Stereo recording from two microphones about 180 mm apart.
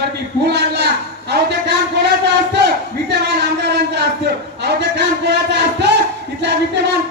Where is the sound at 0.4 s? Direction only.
70° right (ahead or behind).